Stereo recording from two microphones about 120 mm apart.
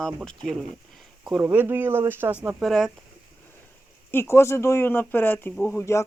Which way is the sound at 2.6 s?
Centre (ahead or behind).